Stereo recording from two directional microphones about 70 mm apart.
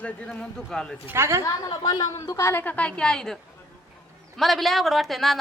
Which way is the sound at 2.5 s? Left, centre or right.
Left.